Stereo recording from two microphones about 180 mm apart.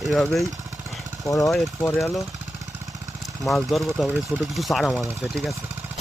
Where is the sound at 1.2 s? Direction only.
20° left (ahead or behind).